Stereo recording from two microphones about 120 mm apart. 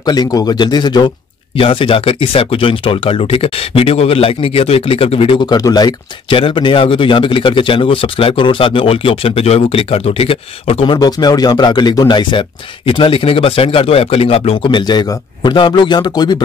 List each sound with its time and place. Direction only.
0.0 s a man's voice: 35° left (ahead or behind)
1.6 s speech: 50° left (ahead or behind)
5.5 s a man's voice: 35° left (ahead or behind)
6.3 s speech: 45° left (ahead or behind)
11.0 s speech: 35° left (ahead or behind); by 14.7 s 55° left (ahead or behind)
14.7 s a man's voice: 40° left (ahead or behind)